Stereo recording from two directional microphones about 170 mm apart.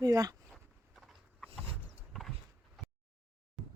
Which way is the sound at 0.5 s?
Centre (ahead or behind).